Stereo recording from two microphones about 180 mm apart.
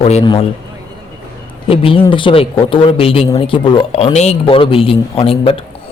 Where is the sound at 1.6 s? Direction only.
30° left (ahead or behind).